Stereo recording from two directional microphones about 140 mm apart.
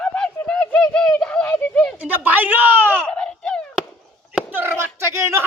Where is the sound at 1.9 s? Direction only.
10° right (ahead or behind).